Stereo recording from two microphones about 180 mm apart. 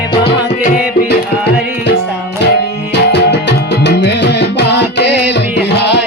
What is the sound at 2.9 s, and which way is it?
Music, 70° left (ahead or behind).